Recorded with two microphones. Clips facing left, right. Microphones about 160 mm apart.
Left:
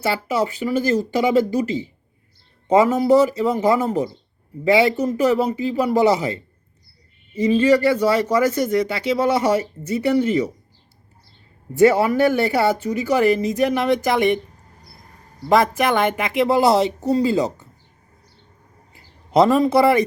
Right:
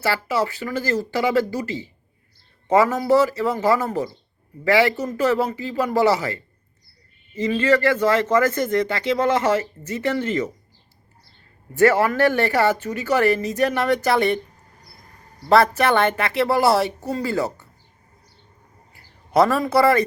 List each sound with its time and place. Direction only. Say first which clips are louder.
0.0 s a man's voice: left 1 dB; 15° left (ahead or behind)
11.8 s a man's voice: left 2 dB; 15° left (ahead or behind)
15.4 s a man's voice: right 1 dB; 15° left (ahead or behind)
18.9 s speech: left 2 dB; 20° left (ahead or behind)